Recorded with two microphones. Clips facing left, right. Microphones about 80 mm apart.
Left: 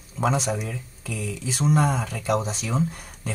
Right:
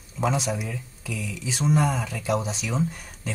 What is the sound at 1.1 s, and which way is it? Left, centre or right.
Speech, left.